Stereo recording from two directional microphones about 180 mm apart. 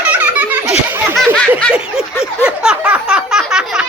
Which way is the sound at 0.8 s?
10° right (ahead or behind).